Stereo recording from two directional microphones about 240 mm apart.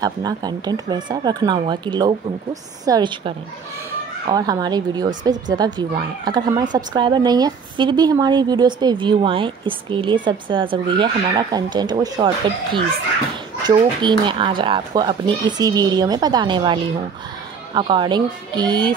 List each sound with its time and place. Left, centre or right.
0.0 s a woman's voice: centre
13.7 s speech: centre